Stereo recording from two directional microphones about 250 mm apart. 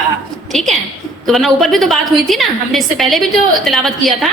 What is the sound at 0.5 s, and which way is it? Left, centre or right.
A woman's voice, centre.